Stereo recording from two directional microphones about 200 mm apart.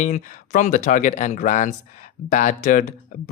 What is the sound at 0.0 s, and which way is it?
Speech, 40° left (ahead or behind).